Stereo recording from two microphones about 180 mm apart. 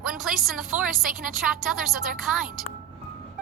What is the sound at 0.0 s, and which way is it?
A woman's voice, centre (ahead or behind).